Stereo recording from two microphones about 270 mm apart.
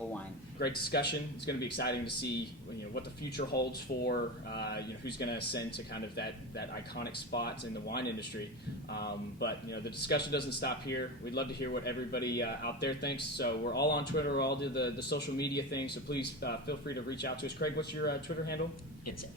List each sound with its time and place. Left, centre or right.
0.8 s speech: left